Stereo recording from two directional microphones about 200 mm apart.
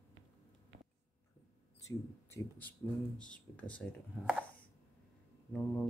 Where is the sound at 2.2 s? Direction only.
10° left (ahead or behind).